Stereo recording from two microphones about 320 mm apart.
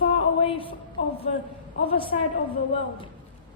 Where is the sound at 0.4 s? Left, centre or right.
Centre.